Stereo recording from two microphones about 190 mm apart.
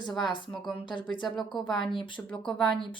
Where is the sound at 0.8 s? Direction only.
25° left (ahead or behind).